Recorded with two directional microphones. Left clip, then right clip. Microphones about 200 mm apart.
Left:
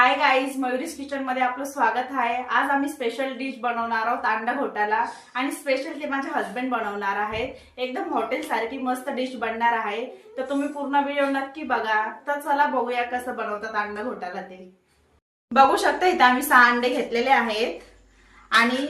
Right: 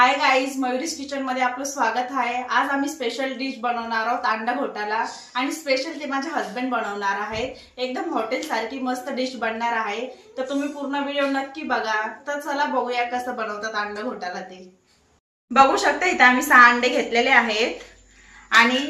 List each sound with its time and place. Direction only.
0.0 s a woman's voice: centre (ahead or behind)
15.8 s a woman's voice: 25° left (ahead or behind)